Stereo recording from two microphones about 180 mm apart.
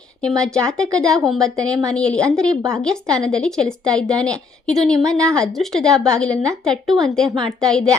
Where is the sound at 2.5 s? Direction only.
15° right (ahead or behind).